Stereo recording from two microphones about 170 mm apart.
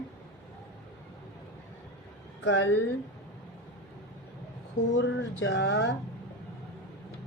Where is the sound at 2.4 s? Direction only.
90° left.